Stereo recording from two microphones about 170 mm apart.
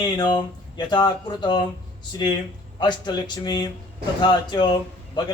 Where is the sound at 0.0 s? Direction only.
25° left (ahead or behind).